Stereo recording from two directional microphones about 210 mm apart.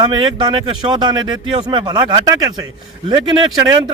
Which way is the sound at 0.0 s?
20° right (ahead or behind).